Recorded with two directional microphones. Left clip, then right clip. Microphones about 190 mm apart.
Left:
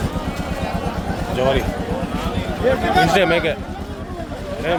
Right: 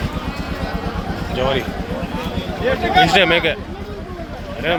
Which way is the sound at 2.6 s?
50° left (ahead or behind).